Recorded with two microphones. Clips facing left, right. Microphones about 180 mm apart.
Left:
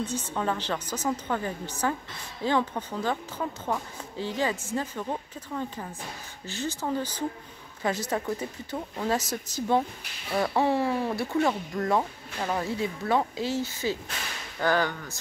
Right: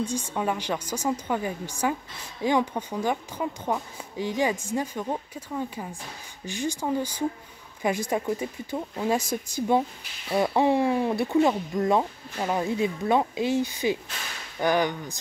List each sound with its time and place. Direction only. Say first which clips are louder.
0.0 s speech: right 2 dB; 10° right (ahead or behind)